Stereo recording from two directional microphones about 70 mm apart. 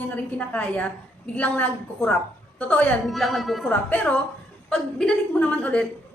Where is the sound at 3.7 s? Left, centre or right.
Left.